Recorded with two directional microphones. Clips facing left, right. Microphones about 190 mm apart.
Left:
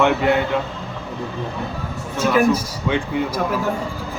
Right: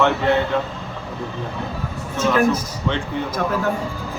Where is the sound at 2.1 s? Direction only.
10° left (ahead or behind).